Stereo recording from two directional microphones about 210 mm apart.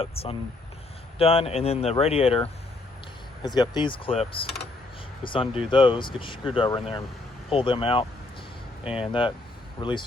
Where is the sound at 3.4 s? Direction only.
20° left (ahead or behind).